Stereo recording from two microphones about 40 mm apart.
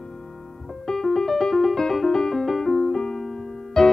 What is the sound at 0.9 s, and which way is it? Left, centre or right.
Music, centre.